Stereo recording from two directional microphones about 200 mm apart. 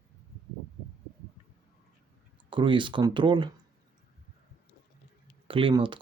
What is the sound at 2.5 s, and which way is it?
Speech, 25° right (ahead or behind).